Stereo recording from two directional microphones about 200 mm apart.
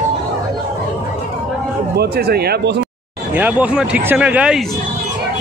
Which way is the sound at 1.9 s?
55° right (ahead or behind).